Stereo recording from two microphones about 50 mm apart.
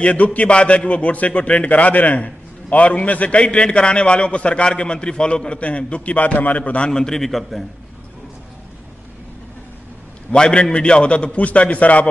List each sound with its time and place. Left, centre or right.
0.0 s a man's voice: left
6.9 s a man's voice: centre
10.3 s a man's voice: centre